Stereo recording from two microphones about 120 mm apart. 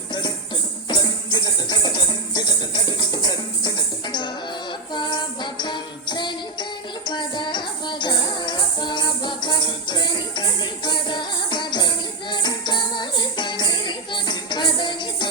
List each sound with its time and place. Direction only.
0.9 s music: 35° left (ahead or behind)
4.9 s music: 40° left (ahead or behind)